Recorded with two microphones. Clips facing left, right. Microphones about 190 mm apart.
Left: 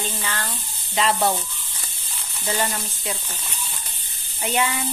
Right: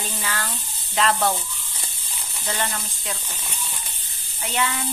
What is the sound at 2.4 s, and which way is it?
Speech, 10° left (ahead or behind).